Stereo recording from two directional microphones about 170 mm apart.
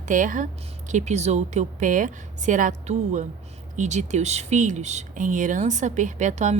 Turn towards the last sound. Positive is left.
turn(degrees=-45)  # may be behind; listen again after turning